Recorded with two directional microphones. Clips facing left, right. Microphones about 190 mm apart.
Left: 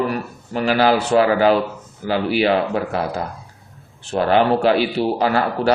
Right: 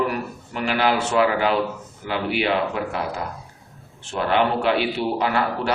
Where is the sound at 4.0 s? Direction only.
35° left (ahead or behind).